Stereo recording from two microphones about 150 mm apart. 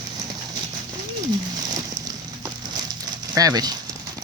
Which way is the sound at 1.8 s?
25° right (ahead or behind).